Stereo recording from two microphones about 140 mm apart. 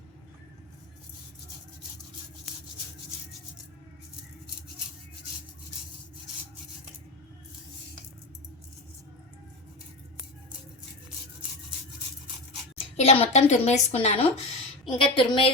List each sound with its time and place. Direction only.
13.0 s a woman's voice: 45° left (ahead or behind)
14.8 s a woman's voice: 35° left (ahead or behind)